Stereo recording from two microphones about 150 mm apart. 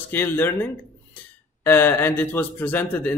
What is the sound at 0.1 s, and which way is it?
Speech, 15° left (ahead or behind).